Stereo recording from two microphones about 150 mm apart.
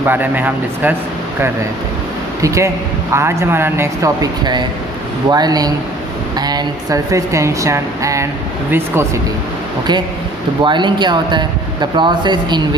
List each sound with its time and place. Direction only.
0.0 s speech: 10° right (ahead or behind)
3.1 s speech: 15° right (ahead or behind)
10.6 s speech: 30° right (ahead or behind)